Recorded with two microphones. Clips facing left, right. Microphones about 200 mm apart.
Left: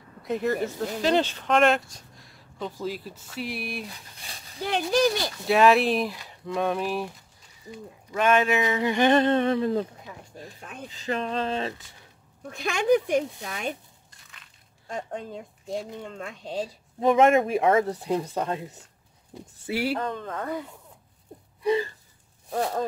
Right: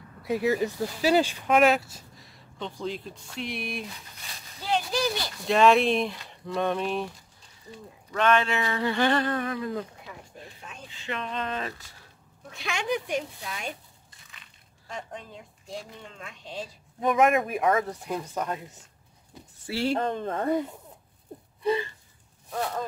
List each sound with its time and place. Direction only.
0.2 s speech: 5° right (ahead or behind)
4.6 s speech: 55° left (ahead or behind)
5.5 s speech: 5° left (ahead or behind)
7.7 s bird: 10° left (ahead or behind); by 9.8 s 30° left (ahead or behind)
10.3 s a sound: 40° left (ahead or behind)
10.9 s speech: 40° left (ahead or behind)
12.4 s speech: 45° left (ahead or behind)
14.9 s speech: 45° left (ahead or behind)
17.0 s speech: 25° left (ahead or behind)
19.6 s speech: 10° left (ahead or behind)
20.0 s speech: 25° right (ahead or behind)
22.5 s speech: 30° left (ahead or behind)